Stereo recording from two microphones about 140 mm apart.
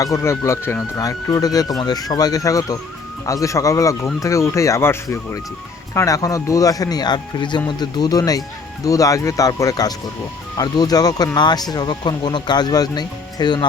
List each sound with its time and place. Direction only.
0.0 s speech: 20° left (ahead or behind)